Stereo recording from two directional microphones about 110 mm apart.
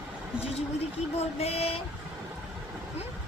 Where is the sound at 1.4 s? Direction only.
70° left (ahead or behind).